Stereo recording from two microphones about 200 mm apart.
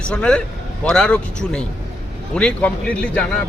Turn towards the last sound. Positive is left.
turn(degrees=5)  # may be behind; listen again after turning